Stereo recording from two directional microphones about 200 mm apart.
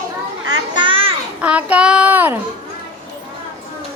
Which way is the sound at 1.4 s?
5° right (ahead or behind).